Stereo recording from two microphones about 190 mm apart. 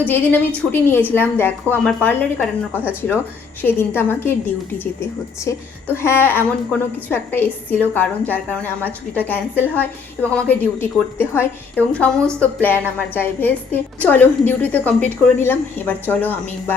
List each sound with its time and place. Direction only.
0.0 s a woman's voice: 10° left (ahead or behind)
5.5 s a woman's voice: 15° left (ahead or behind)